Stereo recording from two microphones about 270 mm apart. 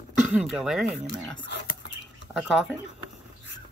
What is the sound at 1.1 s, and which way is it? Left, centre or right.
Speech, left.